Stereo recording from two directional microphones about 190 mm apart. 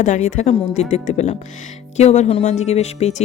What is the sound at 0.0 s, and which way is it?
Speech, 40° left (ahead or behind).